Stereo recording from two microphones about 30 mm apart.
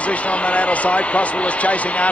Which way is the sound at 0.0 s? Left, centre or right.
Left.